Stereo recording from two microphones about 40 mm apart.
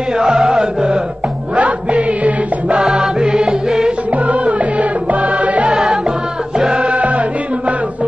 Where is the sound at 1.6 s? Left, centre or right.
Right.